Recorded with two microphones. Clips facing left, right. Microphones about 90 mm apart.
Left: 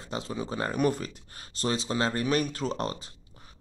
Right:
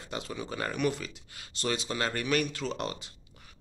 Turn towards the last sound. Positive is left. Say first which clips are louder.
# left 3 dB
turn(degrees=35)  # may be behind; listen again after turning